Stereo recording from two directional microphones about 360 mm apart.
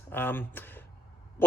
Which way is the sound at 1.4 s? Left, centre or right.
Centre.